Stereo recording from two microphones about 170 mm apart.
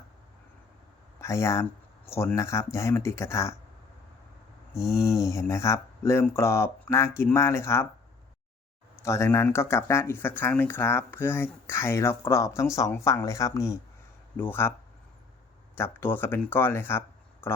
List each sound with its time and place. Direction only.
1.2 s speech: 15° left (ahead or behind)
4.8 s a sound: 5° right (ahead or behind)
5.0 s speech: 15° left (ahead or behind)
9.0 s speech: 15° left (ahead or behind)
15.7 s speech: 15° left (ahead or behind)